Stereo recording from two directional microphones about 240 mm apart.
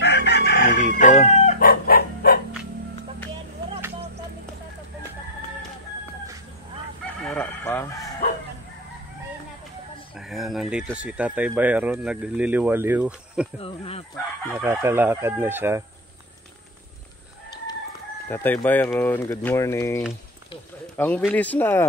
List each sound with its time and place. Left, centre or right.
0.0 s chicken: left
7.2 s chicken: centre
10.1 s speech: centre
13.6 s speech: left
14.5 s chicken: centre
18.3 s speech: centre
21.0 s speech: centre